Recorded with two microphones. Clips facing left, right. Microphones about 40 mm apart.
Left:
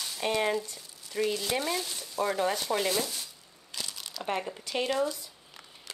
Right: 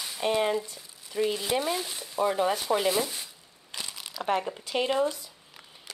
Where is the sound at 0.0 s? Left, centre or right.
Centre.